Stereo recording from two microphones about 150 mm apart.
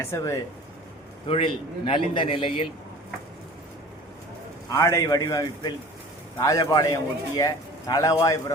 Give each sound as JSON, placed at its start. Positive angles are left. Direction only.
{"t": 0.0, "sound": "a man's voice", "side_deg": 20}
{"t": 1.3, "sound": "a man's voice", "side_deg": 35}
{"t": 4.7, "sound": "a man's voice", "side_deg": 20}